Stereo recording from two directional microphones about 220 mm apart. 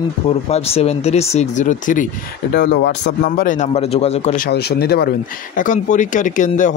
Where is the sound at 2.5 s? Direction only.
50° left (ahead or behind).